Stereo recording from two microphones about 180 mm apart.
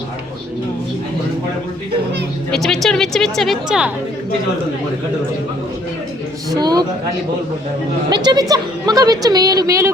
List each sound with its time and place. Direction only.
2.5 s a woman's voice: centre (ahead or behind)
6.5 s a woman's voice: 20° right (ahead or behind)
8.1 s a woman's voice: 25° right (ahead or behind)